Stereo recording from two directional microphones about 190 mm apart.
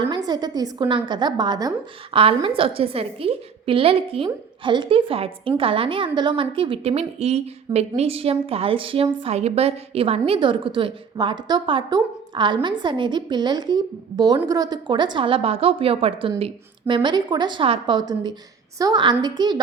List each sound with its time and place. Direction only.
0.3 s a woman's voice: 20° right (ahead or behind)